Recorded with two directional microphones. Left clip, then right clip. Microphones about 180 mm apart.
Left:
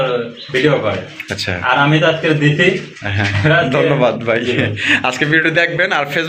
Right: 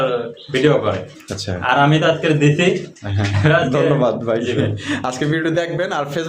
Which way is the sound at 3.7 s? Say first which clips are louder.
Left 3 dB; 10° right (ahead or behind).